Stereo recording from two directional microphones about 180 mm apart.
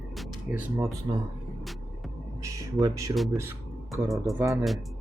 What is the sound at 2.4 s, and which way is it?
Speech, 20° right (ahead or behind).